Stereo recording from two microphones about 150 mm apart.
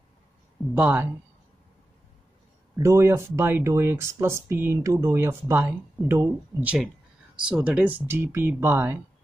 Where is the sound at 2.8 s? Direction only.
20° right (ahead or behind).